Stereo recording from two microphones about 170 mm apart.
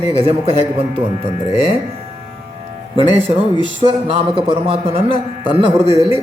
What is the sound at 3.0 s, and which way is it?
A man's voice, 35° right (ahead or behind).